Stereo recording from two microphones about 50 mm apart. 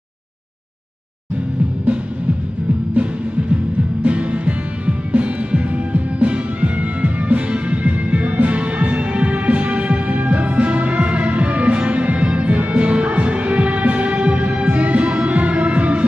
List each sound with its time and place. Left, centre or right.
4.0 s music: right